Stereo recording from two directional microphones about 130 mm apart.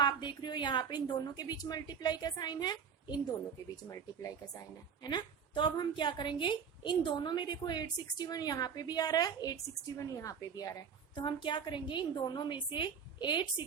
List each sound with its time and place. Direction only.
0.0 s a woman's voice: 35° left (ahead or behind)
5.0 s a woman's voice: 35° left (ahead or behind)